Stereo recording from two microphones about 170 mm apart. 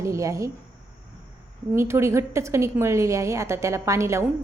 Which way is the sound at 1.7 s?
15° right (ahead or behind).